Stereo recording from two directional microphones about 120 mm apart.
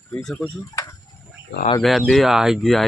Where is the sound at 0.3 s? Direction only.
25° left (ahead or behind).